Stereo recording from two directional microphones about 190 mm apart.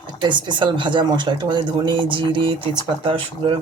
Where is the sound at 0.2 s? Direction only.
25° right (ahead or behind).